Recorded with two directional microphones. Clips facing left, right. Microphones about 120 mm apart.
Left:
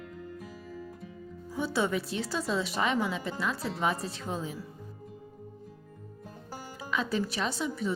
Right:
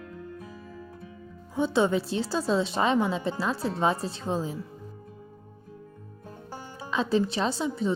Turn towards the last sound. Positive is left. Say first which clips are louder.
# right 4 dB
turn(degrees=-30)  # may be behind; listen again after turning